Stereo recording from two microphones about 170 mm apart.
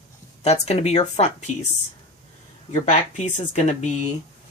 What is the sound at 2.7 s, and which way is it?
Speech, 45° left (ahead or behind).